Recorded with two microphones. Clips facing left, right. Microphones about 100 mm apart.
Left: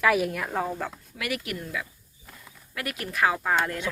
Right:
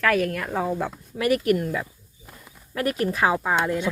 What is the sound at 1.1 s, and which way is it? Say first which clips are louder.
Speech: right 13 dB; 40° right (ahead or behind).